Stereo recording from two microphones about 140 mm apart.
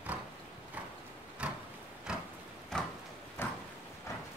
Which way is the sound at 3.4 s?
15° left (ahead or behind).